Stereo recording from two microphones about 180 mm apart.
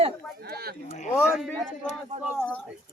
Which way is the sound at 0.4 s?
60° right (ahead or behind).